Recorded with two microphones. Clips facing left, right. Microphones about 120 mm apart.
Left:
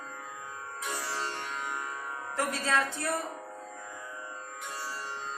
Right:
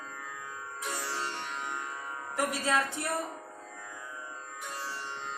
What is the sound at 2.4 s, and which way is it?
Music, 15° right (ahead or behind).